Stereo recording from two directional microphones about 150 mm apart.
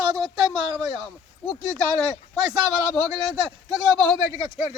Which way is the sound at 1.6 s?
25° right (ahead or behind).